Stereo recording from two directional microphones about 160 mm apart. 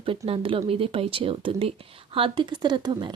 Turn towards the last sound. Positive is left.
turn(degrees=-30)  # may be behind; listen again after turning